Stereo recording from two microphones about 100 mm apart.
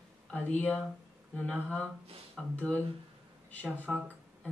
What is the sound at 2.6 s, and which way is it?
Speech, 15° left (ahead or behind).